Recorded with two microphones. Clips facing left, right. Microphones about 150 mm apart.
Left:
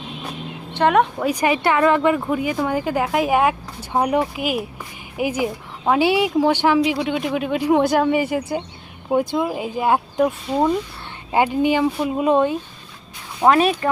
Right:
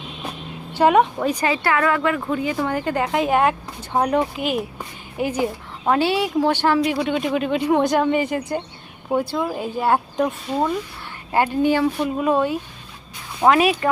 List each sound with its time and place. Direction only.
0.7 s a woman's voice: 5° right (ahead or behind)
1.2 s speech: 10° left (ahead or behind)
13.6 s speech: 10° right (ahead or behind)